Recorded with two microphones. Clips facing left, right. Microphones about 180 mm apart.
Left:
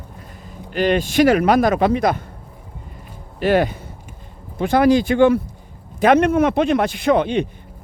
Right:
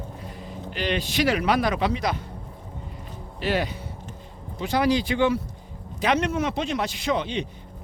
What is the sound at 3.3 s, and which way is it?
Speech, 50° left (ahead or behind).